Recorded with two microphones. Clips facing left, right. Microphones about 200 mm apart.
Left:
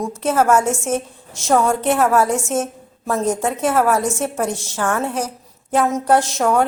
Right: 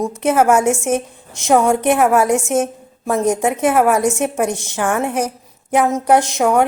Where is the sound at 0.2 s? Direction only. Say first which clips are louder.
Right 2 dB; 15° right (ahead or behind).